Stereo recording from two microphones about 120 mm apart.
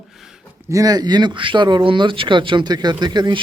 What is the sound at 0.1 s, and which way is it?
Speech, centre (ahead or behind).